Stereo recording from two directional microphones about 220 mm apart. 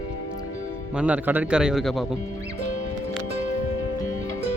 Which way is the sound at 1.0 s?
5° right (ahead or behind).